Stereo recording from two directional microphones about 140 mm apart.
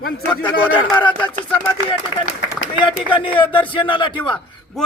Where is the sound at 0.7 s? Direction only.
35° left (ahead or behind).